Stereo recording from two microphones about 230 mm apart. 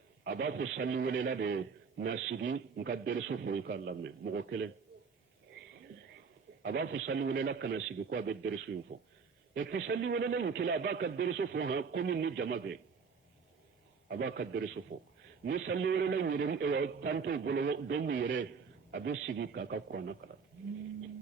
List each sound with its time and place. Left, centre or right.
0.3 s a man's voice: right
6.6 s a man's voice: right
14.1 s a man's voice: right